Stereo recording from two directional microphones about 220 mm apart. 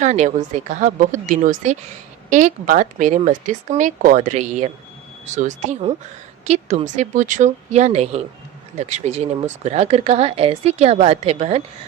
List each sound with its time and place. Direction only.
0.0 s speech: 35° right (ahead or behind)